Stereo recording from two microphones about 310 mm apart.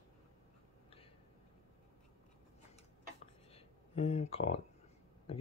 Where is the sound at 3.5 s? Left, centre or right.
Centre.